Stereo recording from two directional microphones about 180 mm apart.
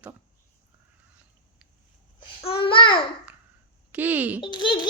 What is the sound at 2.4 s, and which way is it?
Speech, 30° left (ahead or behind).